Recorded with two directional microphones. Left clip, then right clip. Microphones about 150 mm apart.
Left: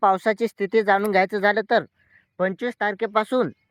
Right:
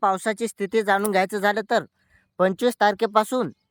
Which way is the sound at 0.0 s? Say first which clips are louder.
Left 3 dB; 20° right (ahead or behind).